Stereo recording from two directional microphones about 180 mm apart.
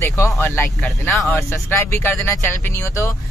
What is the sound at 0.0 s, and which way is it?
Speech, 15° left (ahead or behind).